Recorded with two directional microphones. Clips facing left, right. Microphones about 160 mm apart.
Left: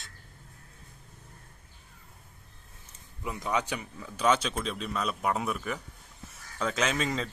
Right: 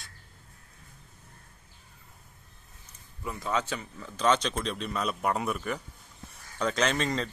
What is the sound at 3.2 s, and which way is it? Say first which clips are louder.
Speech: even; 15° left (ahead or behind).